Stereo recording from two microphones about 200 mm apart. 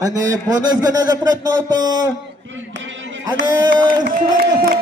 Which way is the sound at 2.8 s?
65° right (ahead or behind).